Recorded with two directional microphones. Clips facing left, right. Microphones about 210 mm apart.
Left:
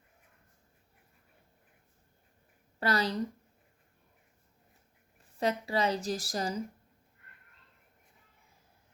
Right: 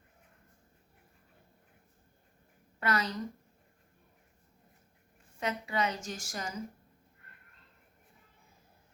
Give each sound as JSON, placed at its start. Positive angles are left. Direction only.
{"t": 2.8, "sound": "a woman's voice", "side_deg": 35}
{"t": 5.4, "sound": "a woman's voice", "side_deg": 35}